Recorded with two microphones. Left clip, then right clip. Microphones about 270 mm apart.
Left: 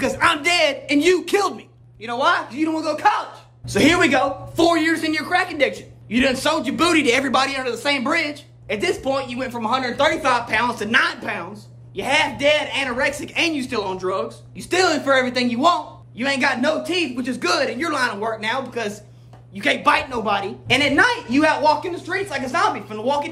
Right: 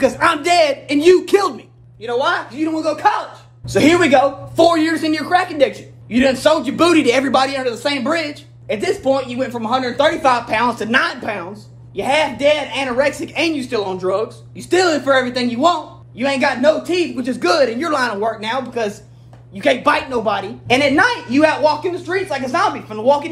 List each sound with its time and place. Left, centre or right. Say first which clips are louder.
0.0 s a man's voice: right 3 dB; centre